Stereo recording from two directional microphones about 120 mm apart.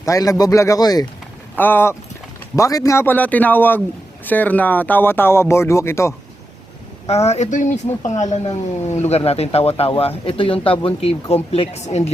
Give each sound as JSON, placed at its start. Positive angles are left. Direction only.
{"t": 0.0, "sound": "speech", "side_deg": 25}
{"t": 1.5, "sound": "speech", "side_deg": 15}
{"t": 7.1, "sound": "speech", "side_deg": 60}
{"t": 8.4, "sound": "speech", "side_deg": 65}